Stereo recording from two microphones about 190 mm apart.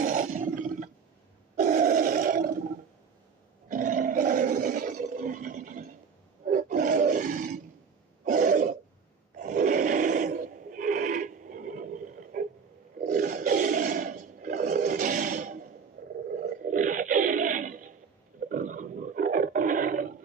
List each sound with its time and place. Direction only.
0.0 s roar: 45° right (ahead or behind)
3.7 s roar: 45° right (ahead or behind)
6.4 s wild animals: 45° right (ahead or behind)
8.2 s throat clearing: 45° right (ahead or behind)
9.4 s a sound: 40° right (ahead or behind)
13.1 s roar: 40° right (ahead or behind)
16.3 s a sound: 45° right (ahead or behind)
18.4 s roaring cats: 45° right (ahead or behind)